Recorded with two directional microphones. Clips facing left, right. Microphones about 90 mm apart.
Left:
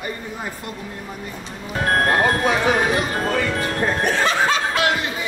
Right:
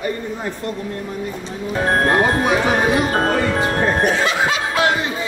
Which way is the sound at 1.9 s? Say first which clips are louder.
Right 1 dB; 25° right (ahead or behind).